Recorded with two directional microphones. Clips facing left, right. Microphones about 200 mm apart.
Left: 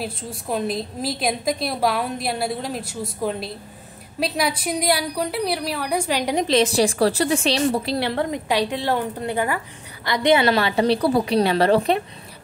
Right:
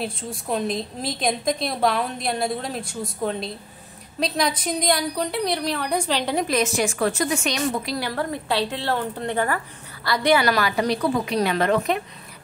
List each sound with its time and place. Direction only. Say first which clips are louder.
0.0 s a woman's voice: even; 5° left (ahead or behind)
6.4 s a woman's voice: left 4 dB; 30° left (ahead or behind)